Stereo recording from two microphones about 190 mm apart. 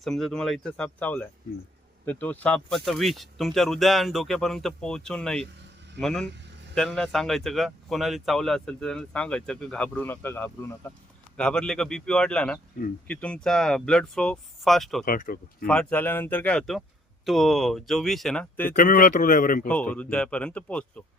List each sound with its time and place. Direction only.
0.0 s speech: centre (ahead or behind)
15.0 s a man's voice: 50° left (ahead or behind)
15.6 s speech: 5° left (ahead or behind)
18.8 s a man's voice: 45° left (ahead or behind)
19.9 s speech: 5° left (ahead or behind)